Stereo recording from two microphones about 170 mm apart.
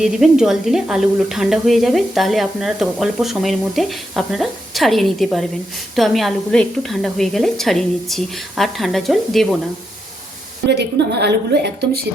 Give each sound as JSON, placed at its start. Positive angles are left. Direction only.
{"t": 0.0, "sound": "speech", "side_deg": -5}
{"t": 10.7, "sound": "a woman's voice", "side_deg": -80}